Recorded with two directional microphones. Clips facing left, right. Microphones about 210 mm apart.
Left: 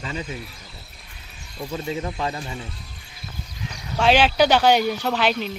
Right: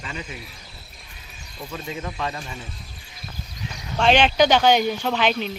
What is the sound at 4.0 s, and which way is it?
Speech, 5° left (ahead or behind).